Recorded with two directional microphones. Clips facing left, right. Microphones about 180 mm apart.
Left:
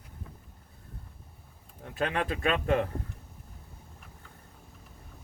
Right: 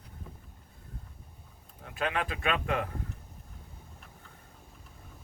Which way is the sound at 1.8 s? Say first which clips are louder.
Left 2 dB; 40° left (ahead or behind).